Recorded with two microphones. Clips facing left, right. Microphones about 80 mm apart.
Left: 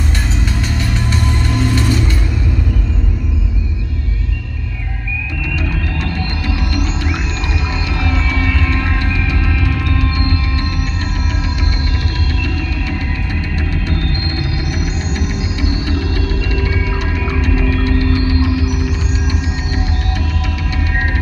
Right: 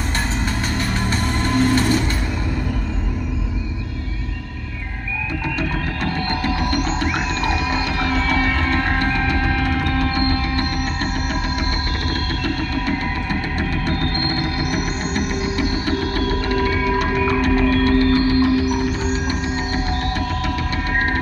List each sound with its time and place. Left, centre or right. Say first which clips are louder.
1.1 s music: right 2 dB; right
8.0 s music: even; right
14.7 s music: even; right